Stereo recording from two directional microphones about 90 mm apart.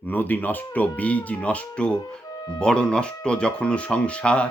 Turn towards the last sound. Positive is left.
turn(degrees=10)  # may be behind; listen again after turning